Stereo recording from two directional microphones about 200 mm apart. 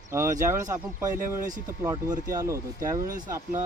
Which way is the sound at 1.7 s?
15° right (ahead or behind).